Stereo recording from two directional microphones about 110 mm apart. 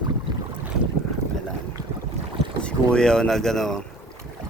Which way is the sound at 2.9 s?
5° left (ahead or behind).